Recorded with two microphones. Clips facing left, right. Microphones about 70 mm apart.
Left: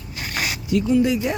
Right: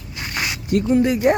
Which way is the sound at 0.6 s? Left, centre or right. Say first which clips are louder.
Right 1 dB; right.